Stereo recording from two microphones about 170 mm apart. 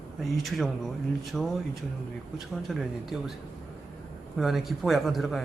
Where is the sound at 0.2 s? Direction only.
Centre (ahead or behind).